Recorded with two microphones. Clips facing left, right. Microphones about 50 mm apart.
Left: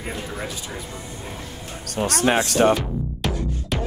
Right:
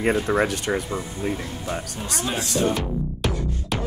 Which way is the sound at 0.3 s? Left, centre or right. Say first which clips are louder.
Right 10 dB; right.